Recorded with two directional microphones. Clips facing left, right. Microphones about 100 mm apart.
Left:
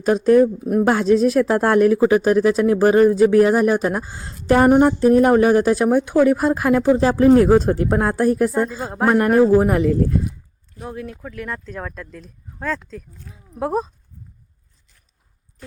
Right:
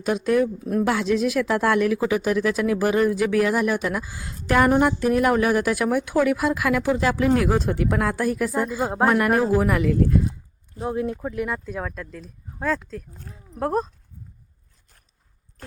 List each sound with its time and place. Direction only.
0.0 s a woman's voice: 40° left (ahead or behind)
0.6 s a woman's voice: 20° left (ahead or behind)
0.9 s a woman's voice: 40° left (ahead or behind)
8.8 s speech: 20° right (ahead or behind)
9.0 s a woman's voice: 35° left (ahead or behind)
10.8 s speech: 25° right (ahead or behind)
11.4 s speech: 10° right (ahead or behind)